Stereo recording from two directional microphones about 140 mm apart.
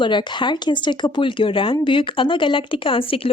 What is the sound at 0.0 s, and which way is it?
Speech, 35° left (ahead or behind).